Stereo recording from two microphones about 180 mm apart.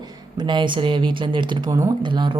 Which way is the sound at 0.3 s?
25° right (ahead or behind).